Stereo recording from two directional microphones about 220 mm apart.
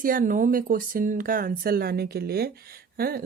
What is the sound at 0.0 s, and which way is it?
Speech, 40° right (ahead or behind).